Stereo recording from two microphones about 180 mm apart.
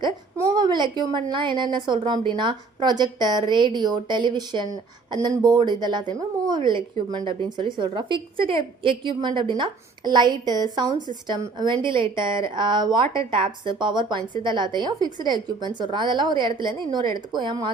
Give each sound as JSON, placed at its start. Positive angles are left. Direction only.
{"t": 0.0, "sound": "a woman's voice", "side_deg": -20}